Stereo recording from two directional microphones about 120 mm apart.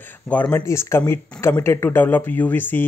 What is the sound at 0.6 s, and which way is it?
Speech, 25° left (ahead or behind).